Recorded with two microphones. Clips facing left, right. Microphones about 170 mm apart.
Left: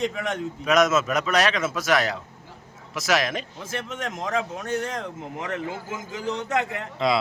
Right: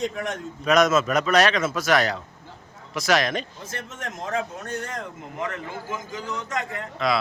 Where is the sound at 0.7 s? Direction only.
Centre (ahead or behind).